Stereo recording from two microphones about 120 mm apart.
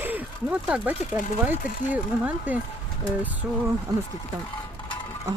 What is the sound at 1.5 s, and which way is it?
Speech, 15° right (ahead or behind).